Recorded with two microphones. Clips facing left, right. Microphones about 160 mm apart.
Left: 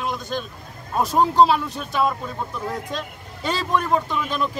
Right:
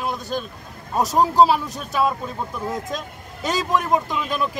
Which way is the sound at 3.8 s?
15° right (ahead or behind).